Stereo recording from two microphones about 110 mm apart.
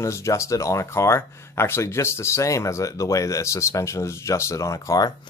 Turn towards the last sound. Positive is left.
turn(degrees=30)  # may be behind; listen again after turning